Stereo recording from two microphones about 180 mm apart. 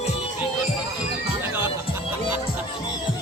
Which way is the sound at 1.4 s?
15° right (ahead or behind).